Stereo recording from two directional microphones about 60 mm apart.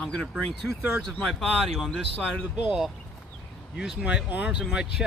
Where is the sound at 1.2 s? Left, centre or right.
Centre.